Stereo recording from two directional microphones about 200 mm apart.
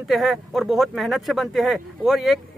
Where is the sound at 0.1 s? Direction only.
Centre (ahead or behind).